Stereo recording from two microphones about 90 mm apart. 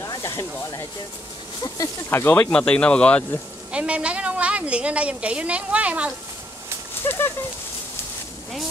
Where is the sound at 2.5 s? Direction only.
10° left (ahead or behind).